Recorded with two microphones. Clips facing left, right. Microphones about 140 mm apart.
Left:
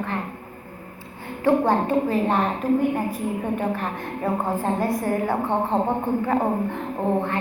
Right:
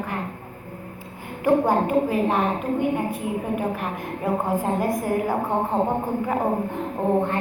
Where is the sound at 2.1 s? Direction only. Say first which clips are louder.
Even; 5° right (ahead or behind).